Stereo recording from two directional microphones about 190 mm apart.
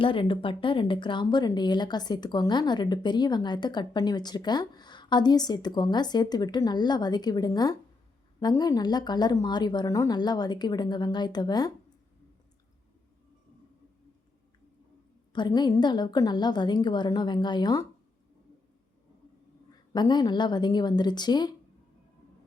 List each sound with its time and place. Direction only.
0.0 s speech: 25° left (ahead or behind)
15.3 s speech: 25° left (ahead or behind)
19.9 s speech: 20° left (ahead or behind)